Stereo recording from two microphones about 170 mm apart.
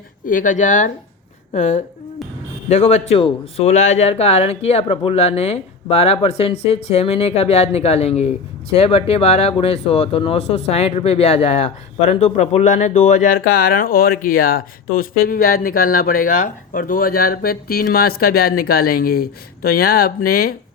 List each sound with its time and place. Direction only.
0.3 s speech: 50° left (ahead or behind)